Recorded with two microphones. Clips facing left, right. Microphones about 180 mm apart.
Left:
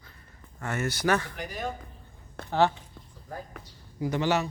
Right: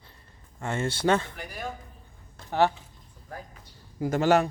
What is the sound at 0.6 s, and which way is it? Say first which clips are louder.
Speech: right 2 dB; 25° right (ahead or behind).